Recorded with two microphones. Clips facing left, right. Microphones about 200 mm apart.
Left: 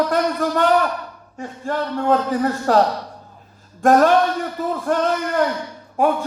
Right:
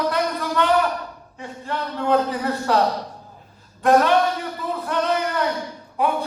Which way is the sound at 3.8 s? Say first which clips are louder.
Left 3 dB; 45° left (ahead or behind).